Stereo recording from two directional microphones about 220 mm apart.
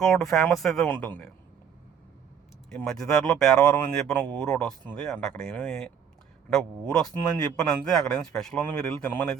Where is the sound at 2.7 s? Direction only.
Centre (ahead or behind).